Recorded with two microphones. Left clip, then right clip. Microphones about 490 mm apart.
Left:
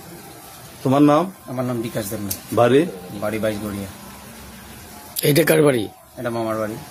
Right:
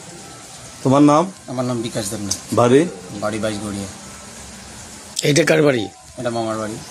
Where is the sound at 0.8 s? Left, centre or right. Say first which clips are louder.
Right 2 dB; left.